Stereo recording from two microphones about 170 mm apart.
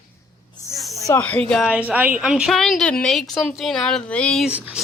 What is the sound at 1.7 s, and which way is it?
A woman's voice, 10° right (ahead or behind).